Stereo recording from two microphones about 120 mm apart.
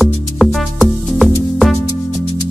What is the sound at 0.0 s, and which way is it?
Music, centre (ahead or behind).